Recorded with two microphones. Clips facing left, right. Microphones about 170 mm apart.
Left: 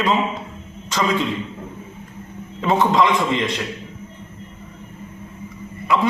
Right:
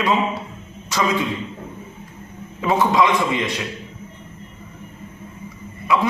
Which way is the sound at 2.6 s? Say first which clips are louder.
Even; 5° right (ahead or behind).